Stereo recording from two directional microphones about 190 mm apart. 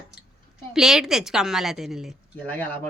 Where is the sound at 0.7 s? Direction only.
5° right (ahead or behind).